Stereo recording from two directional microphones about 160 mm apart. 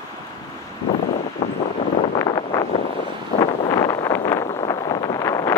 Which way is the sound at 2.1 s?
25° left (ahead or behind).